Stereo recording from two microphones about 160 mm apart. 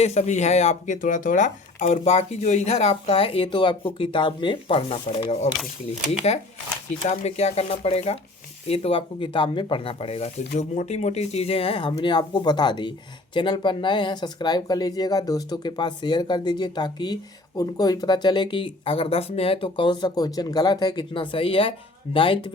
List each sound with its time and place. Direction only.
0.0 s speech: 40° left (ahead or behind)